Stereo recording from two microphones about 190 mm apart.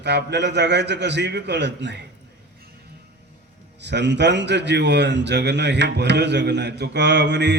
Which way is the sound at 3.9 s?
65° right (ahead or behind).